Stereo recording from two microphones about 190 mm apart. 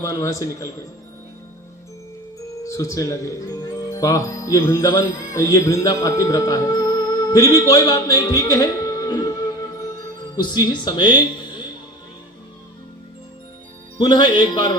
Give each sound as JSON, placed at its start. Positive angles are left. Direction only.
{"t": 0.0, "sound": "a man's voice", "side_deg": 15}
{"t": 2.6, "sound": "speech", "side_deg": 15}
{"t": 14.0, "sound": "speech", "side_deg": 25}